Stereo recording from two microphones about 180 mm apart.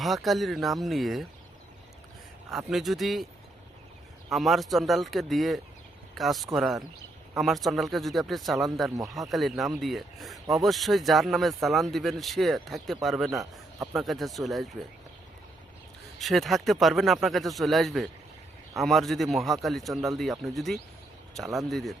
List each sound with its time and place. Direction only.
0.0 s speech: centre (ahead or behind)
2.5 s speech: centre (ahead or behind)
4.3 s speech: centre (ahead or behind)
16.1 s speech: centre (ahead or behind)